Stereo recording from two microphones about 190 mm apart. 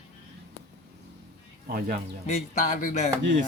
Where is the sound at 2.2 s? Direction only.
40° left (ahead or behind).